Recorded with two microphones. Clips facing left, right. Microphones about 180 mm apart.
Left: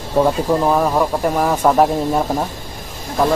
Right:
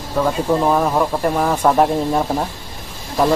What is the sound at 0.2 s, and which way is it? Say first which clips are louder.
Speech: left 4 dB; 25° left (ahead or behind).